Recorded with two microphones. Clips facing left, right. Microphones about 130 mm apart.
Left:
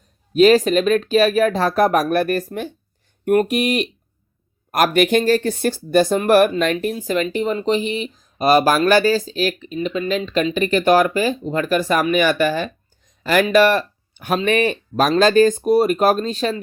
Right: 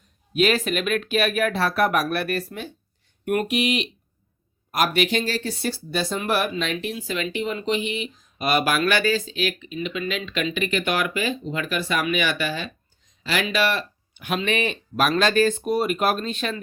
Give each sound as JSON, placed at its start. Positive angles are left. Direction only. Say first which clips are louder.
{"t": 0.3, "sound": "speech", "louder": "left 9 dB", "side_deg": 35}